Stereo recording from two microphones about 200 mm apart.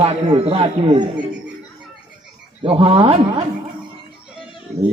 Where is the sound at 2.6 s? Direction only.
25° right (ahead or behind).